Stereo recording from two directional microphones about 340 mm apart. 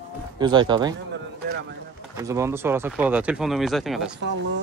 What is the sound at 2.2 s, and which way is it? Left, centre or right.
Speech, centre.